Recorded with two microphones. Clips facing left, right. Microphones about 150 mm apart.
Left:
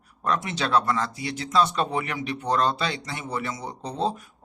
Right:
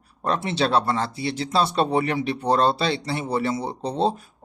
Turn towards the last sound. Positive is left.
turn(degrees=-30)  # may be behind; listen again after turning